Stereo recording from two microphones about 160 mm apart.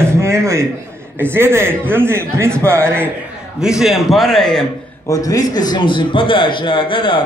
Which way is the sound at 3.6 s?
5° right (ahead or behind).